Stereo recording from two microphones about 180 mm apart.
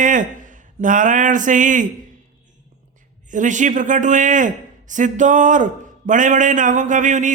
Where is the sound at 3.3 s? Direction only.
45° right (ahead or behind).